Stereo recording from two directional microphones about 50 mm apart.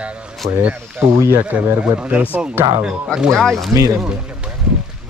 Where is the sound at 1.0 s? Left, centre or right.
Right.